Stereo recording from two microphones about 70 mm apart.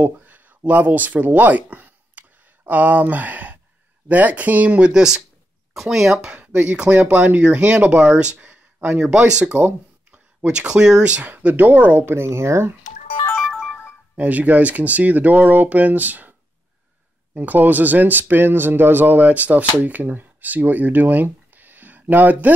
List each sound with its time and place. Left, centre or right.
0.0 s speech: right
10.4 s speech: centre; by 12.7 s right
13.4 s music: centre
14.1 s speech: right